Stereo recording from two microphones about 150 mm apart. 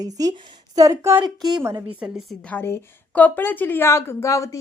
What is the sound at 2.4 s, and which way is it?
Speech, 15° left (ahead or behind).